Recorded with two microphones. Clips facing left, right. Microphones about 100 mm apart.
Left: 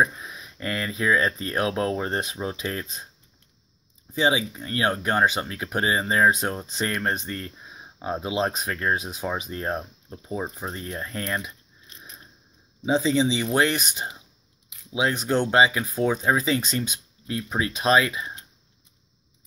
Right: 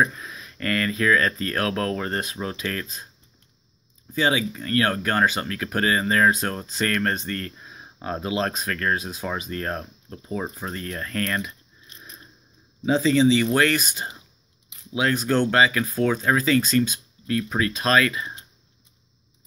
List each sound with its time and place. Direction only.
0.0 s speech: 15° left (ahead or behind)
4.1 s speech: 15° left (ahead or behind)
12.8 s speech: 15° left (ahead or behind)